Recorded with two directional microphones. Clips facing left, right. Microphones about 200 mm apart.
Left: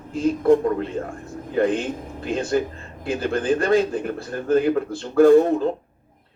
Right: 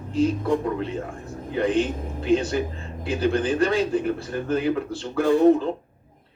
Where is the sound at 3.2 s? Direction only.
45° left (ahead or behind).